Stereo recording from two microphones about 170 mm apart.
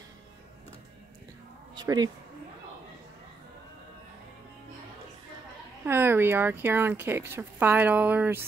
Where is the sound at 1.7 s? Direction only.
25° right (ahead or behind).